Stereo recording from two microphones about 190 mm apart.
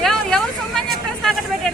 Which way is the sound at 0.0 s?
Centre (ahead or behind).